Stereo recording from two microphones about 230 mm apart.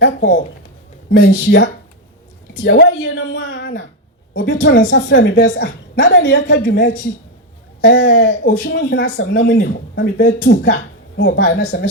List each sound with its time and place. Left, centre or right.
1.1 s a woman's voice: left
2.6 s a sound: left
4.4 s a woman's voice: left
11.2 s a woman's voice: left